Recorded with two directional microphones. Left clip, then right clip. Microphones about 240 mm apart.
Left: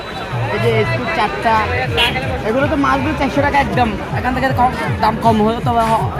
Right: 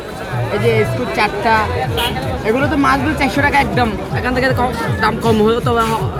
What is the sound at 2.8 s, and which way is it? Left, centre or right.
Speech, centre.